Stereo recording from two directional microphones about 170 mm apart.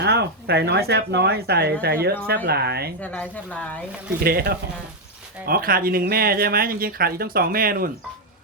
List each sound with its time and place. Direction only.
0.0 s speech: 70° right (ahead or behind)
3.0 s speech: 10° left (ahead or behind)
4.2 s speech: 65° right (ahead or behind)